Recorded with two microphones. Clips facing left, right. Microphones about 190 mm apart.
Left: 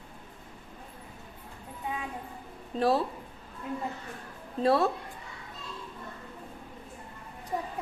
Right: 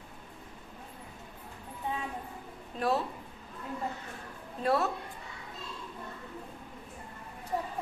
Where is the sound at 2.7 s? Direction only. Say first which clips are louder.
Left 5 dB; 35° left (ahead or behind).